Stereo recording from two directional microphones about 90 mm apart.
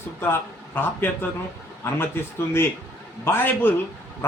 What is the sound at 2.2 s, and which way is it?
A man's voice, 25° left (ahead or behind).